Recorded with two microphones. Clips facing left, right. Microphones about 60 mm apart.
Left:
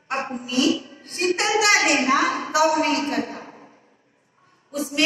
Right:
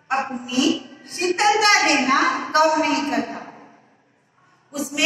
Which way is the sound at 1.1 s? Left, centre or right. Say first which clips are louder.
Right 4 dB; centre.